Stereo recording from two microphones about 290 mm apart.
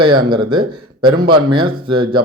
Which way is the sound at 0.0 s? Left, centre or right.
Centre.